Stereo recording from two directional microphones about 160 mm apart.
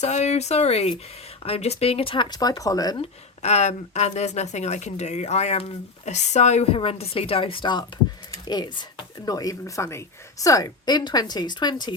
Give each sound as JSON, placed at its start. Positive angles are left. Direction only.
{"t": 0.0, "sound": "speech", "side_deg": 45}
{"t": 3.0, "sound": "a woman's voice", "side_deg": 45}